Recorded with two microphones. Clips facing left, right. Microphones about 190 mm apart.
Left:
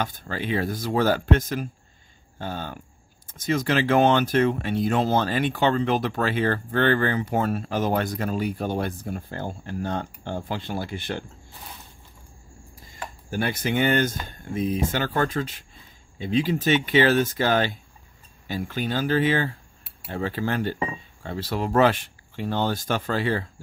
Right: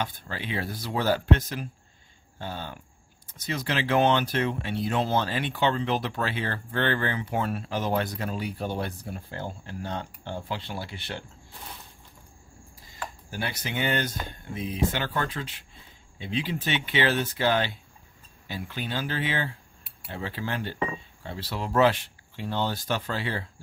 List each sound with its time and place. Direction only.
0.0 s speech: 45° left (ahead or behind)
13.3 s speech: 50° left (ahead or behind)